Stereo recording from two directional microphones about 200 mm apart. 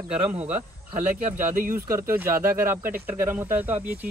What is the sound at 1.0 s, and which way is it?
Speech, 10° right (ahead or behind).